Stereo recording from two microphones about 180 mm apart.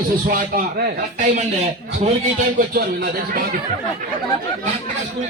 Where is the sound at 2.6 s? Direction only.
55° right (ahead or behind).